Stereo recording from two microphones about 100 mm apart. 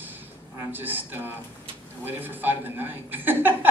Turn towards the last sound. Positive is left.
turn(degrees=-20)  # may be behind; listen again after turning